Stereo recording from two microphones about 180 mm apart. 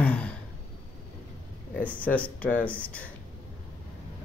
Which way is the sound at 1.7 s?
10° left (ahead or behind).